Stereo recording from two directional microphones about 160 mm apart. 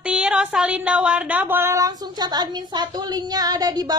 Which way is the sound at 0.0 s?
5° right (ahead or behind).